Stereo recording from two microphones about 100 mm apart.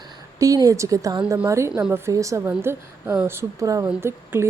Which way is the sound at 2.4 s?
20° right (ahead or behind).